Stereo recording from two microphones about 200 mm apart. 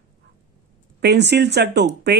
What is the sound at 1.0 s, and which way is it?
Speech, 55° right (ahead or behind).